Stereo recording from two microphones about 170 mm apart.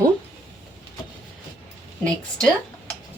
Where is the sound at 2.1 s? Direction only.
5° left (ahead or behind).